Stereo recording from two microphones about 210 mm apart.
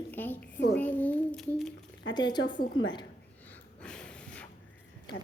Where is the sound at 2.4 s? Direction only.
60° left (ahead or behind).